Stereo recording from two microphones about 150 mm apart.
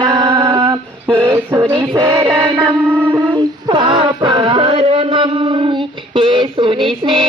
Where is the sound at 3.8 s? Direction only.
35° right (ahead or behind).